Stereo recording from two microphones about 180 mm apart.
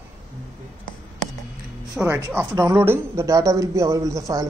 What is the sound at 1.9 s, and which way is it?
Speech, 10° right (ahead or behind).